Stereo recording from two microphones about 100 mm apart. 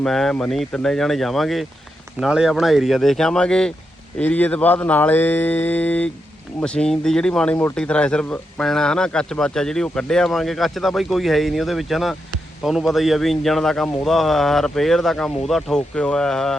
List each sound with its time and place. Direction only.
0.0 s speech: 5° left (ahead or behind)